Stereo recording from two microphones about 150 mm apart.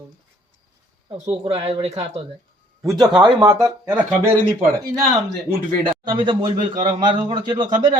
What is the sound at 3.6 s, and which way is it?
Speech, 15° right (ahead or behind).